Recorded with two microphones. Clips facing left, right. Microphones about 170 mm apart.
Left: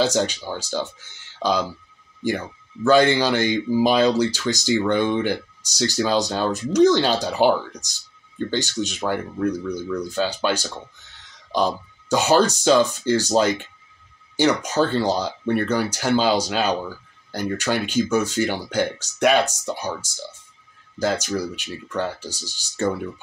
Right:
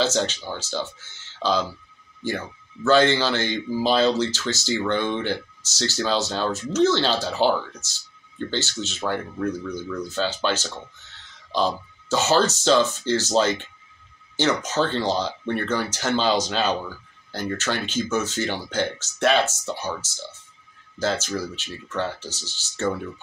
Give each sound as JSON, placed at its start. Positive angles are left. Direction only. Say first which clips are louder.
{"t": 0.0, "sound": "speech", "louder": "left 2 dB", "side_deg": 15}
{"t": 2.8, "sound": "speech", "louder": "left 2 dB", "side_deg": 15}